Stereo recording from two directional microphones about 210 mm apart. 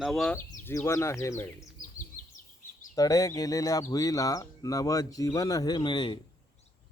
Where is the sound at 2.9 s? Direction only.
15° left (ahead or behind).